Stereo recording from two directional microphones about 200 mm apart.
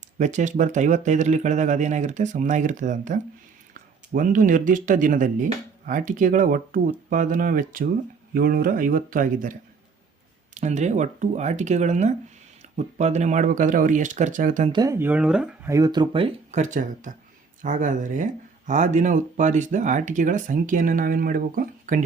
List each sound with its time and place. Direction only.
0.2 s speech: 35° right (ahead or behind)
10.5 s speech: 35° right (ahead or behind)
14.7 s speech: 15° right (ahead or behind)
15.7 s speech: 20° right (ahead or behind); by 22.0 s 40° right (ahead or behind)